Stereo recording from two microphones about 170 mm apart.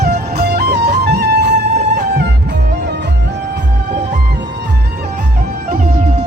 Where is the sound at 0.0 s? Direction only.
70° right (ahead or behind).